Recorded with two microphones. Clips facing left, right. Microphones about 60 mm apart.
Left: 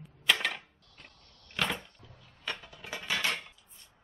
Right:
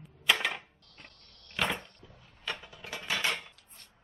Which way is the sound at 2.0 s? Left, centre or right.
Right.